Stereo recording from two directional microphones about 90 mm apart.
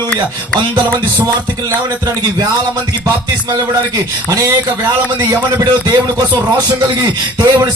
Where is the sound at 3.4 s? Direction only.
50° right (ahead or behind); by 4.8 s 30° right (ahead or behind).